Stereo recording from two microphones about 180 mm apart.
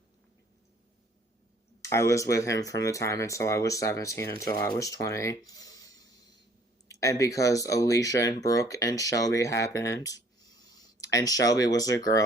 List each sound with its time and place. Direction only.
1.8 s speech: 15° left (ahead or behind)